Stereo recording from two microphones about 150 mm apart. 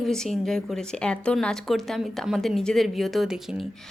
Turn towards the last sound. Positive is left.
turn(degrees=-5)  # may be behind; listen again after turning